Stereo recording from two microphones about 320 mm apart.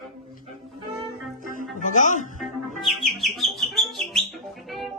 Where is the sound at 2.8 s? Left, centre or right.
Centre.